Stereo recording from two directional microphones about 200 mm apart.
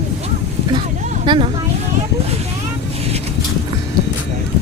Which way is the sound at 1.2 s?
25° right (ahead or behind).